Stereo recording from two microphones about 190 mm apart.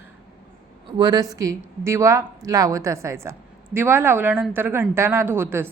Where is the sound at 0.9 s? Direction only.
20° right (ahead or behind).